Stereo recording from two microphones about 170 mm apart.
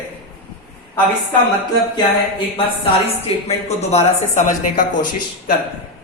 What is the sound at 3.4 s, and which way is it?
Speech, 40° left (ahead or behind).